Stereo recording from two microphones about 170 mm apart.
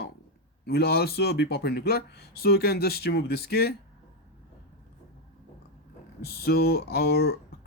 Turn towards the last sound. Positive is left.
turn(degrees=70)  # may be behind; listen again after turning